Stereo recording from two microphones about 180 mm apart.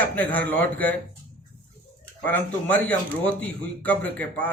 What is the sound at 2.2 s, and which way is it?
A man's voice, 10° left (ahead or behind).